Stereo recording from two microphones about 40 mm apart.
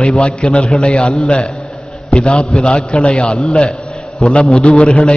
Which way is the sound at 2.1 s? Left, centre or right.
Left.